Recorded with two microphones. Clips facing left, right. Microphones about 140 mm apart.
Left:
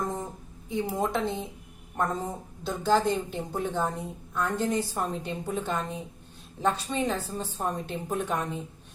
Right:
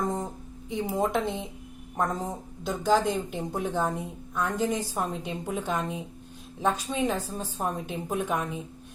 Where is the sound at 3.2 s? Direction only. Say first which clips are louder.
Right 1 dB; 10° right (ahead or behind).